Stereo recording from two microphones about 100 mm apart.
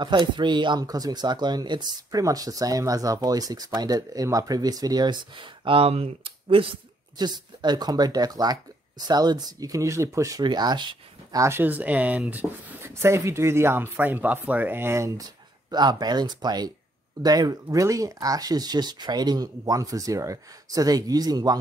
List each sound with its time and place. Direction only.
0.0 s speech: 50° right (ahead or behind)
7.2 s speech: 45° right (ahead or behind); by 10.4 s 30° right (ahead or behind)
10.4 s speech: 45° right (ahead or behind)
11.3 s speech: 30° right (ahead or behind)
11.6 s speech: 15° right (ahead or behind); by 15.2 s 30° right (ahead or behind)
15.7 s speech: 45° right (ahead or behind)